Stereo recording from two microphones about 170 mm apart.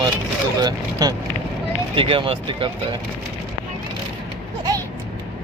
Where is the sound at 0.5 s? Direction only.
20° right (ahead or behind).